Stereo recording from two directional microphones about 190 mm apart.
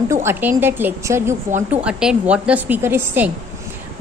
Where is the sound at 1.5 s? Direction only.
40° right (ahead or behind).